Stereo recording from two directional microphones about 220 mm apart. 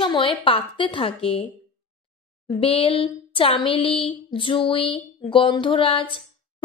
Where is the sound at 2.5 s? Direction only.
25° left (ahead or behind).